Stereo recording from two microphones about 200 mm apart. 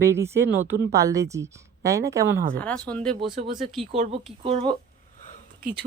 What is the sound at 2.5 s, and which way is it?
Speech, 5° left (ahead or behind).